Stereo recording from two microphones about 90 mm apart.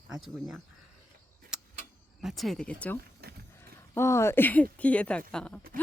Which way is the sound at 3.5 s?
30° left (ahead or behind).